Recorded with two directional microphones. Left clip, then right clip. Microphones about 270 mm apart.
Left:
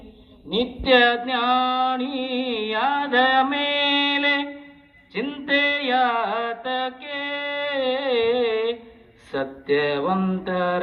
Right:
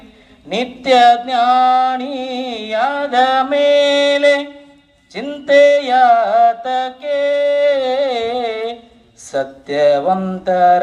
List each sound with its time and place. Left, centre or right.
0.5 s music: right